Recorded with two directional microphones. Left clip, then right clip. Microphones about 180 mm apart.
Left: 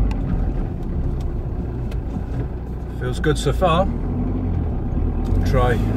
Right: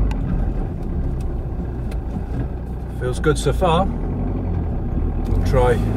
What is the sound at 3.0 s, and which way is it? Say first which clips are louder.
Speech: right 2 dB; 10° left (ahead or behind).